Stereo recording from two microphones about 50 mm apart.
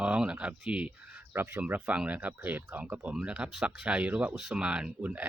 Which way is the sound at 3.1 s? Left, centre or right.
Right.